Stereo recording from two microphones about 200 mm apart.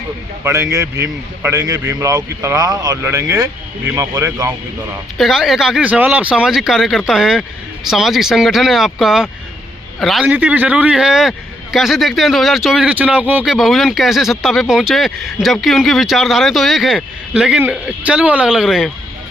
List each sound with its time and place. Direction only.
0.4 s a man's voice: 15° right (ahead or behind)
5.1 s a man's voice: centre (ahead or behind)